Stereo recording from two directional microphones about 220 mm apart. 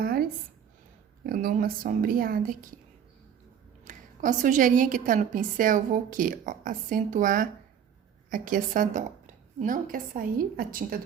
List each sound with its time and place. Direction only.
0.0 s a sound: 40° right (ahead or behind)
1.3 s a woman's voice: 40° right (ahead or behind)
3.8 s a woman's voice: 35° right (ahead or behind)